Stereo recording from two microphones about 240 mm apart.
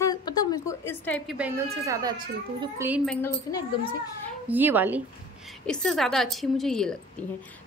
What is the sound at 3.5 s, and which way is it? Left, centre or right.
Speech, centre.